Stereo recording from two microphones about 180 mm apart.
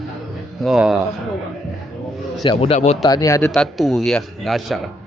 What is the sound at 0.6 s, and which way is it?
Speech, centre (ahead or behind).